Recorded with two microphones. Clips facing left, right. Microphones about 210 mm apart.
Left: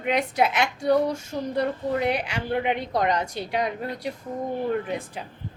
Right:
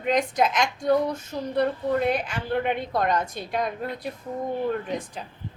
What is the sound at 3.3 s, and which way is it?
Speech, 75° left (ahead or behind).